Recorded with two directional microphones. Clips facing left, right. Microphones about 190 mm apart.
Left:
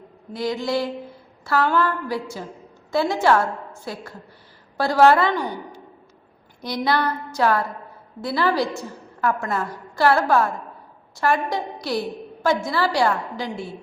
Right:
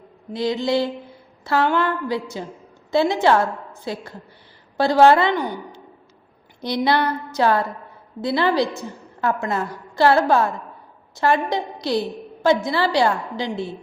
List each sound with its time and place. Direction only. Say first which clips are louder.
0.3 s a woman's voice: right 3 dB; 25° right (ahead or behind)